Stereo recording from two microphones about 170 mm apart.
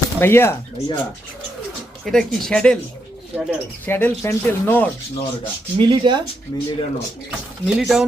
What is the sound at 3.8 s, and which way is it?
Speech, 15° left (ahead or behind).